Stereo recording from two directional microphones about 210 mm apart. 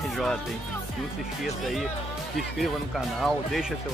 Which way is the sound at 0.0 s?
Centre (ahead or behind).